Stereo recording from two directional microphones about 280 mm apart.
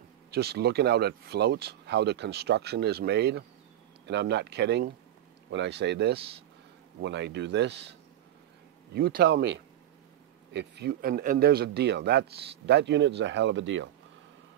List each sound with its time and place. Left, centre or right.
0.3 s speech: right
8.9 s speech: right